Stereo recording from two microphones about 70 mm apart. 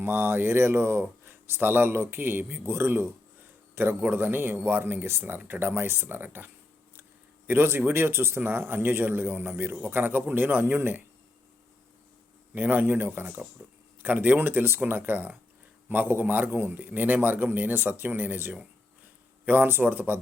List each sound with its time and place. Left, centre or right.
0.0 s a man's voice: right
12.5 s a man's voice: right